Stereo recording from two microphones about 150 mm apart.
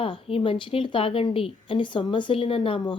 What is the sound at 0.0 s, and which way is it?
A woman's voice, 40° left (ahead or behind).